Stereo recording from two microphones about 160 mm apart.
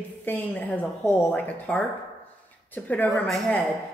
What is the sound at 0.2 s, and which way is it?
A man's voice, 10° left (ahead or behind).